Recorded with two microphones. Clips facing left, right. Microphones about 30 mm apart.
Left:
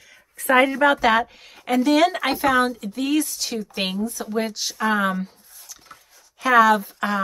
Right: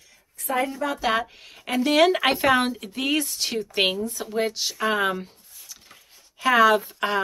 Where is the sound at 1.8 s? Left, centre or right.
Centre.